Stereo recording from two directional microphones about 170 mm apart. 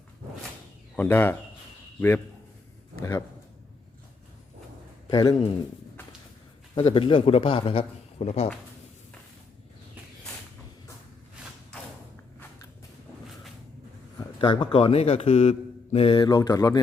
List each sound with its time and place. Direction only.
0.9 s a man's voice: 10° left (ahead or behind)
5.1 s a man's voice: 25° left (ahead or behind)
6.7 s speech: 35° left (ahead or behind)
14.4 s speech: 30° left (ahead or behind)